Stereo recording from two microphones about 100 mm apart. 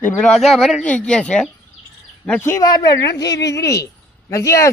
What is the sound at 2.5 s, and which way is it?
Speech, 40° left (ahead or behind).